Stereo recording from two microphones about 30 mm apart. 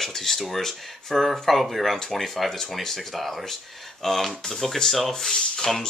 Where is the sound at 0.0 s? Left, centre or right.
Centre.